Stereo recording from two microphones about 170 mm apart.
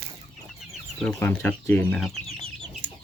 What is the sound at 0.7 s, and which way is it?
Speech, 5° left (ahead or behind).